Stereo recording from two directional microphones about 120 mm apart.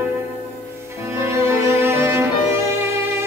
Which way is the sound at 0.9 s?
25° right (ahead or behind).